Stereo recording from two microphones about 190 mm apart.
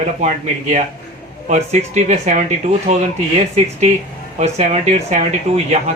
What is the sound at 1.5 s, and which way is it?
Speech, 40° right (ahead or behind).